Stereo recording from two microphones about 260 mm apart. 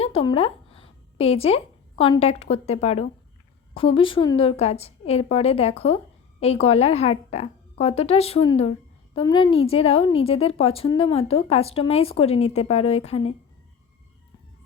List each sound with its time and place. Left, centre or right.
0.0 s a woman's voice: left